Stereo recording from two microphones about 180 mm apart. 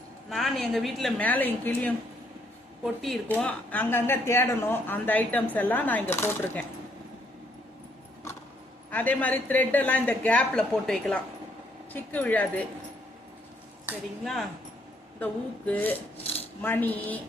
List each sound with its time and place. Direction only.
0.3 s a woman's voice: centre (ahead or behind)
8.9 s a woman's voice: 10° left (ahead or behind)
15.2 s a woman's voice: 10° left (ahead or behind)
16.1 s rub: 35° left (ahead or behind)
16.6 s a woman's voice: 10° left (ahead or behind)